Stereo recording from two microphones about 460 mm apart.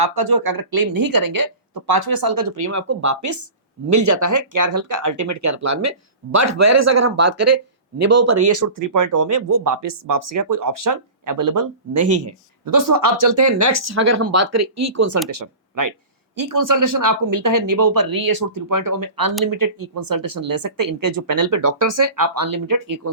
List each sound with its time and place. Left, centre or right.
0.0 s speech: right